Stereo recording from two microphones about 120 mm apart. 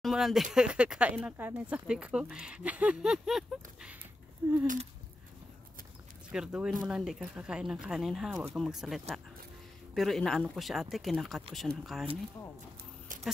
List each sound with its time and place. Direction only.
0.0 s speech: 5° right (ahead or behind)
4.4 s speech: 20° right (ahead or behind)
6.3 s speech: 5° right (ahead or behind)
13.1 s keys jangling: 90° right